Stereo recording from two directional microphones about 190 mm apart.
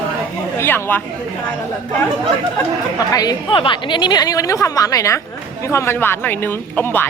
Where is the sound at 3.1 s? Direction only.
20° left (ahead or behind).